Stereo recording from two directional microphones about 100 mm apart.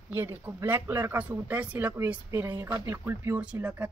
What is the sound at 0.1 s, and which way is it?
Speech, 20° right (ahead or behind).